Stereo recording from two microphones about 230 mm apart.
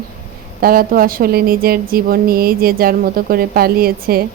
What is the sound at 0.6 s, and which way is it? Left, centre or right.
Speech, right.